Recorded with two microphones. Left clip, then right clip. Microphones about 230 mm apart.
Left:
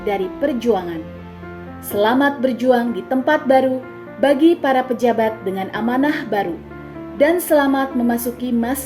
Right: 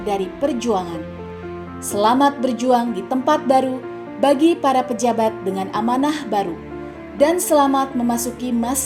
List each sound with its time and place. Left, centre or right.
0.0 s a woman's voice: right